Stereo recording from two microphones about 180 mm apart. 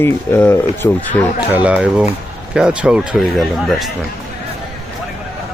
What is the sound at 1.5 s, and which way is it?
Speech, 5° right (ahead or behind).